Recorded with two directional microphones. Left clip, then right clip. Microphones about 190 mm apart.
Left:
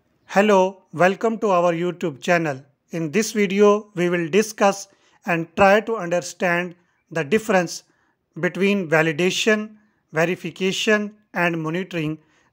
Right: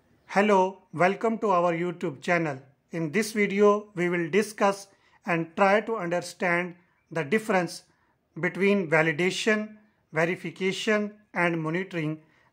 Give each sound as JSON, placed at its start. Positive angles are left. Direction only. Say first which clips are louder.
{"t": 0.3, "sound": "speech", "louder": "left 6 dB", "side_deg": 25}